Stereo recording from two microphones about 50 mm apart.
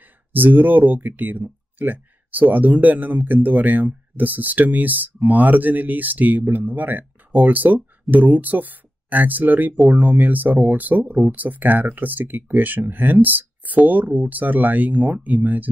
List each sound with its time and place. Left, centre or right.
0.3 s speech: right